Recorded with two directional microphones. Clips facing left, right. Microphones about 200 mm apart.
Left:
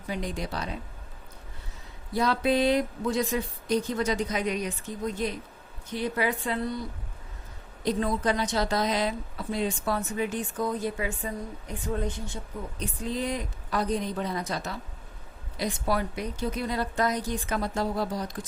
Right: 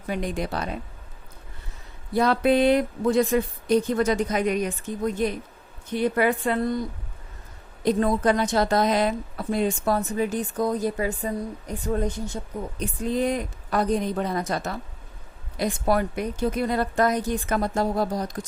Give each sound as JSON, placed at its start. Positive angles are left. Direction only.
{"t": 0.1, "sound": "a woman's voice", "side_deg": -55}
{"t": 2.1, "sound": "a woman's voice", "side_deg": -55}
{"t": 7.9, "sound": "a woman's voice", "side_deg": -50}